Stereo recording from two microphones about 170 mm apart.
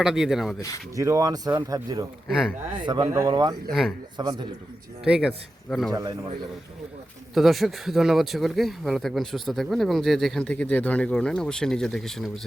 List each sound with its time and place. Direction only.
0.0 s speech: centre (ahead or behind)
0.9 s speech: 20° right (ahead or behind)
2.3 s speech: centre (ahead or behind)
2.8 s speech: 25° right (ahead or behind)
3.7 s speech: centre (ahead or behind)
4.2 s speech: 25° right (ahead or behind)
5.0 s speech: 5° right (ahead or behind)
5.9 s speech: 25° right (ahead or behind)
7.3 s speech: centre (ahead or behind)